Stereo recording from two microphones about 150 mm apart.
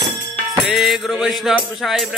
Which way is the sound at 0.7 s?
Centre (ahead or behind).